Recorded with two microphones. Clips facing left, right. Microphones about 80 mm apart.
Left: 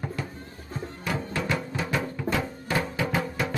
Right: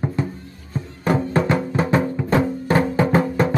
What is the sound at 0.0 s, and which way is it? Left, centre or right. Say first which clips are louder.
Music: right 9 dB; right.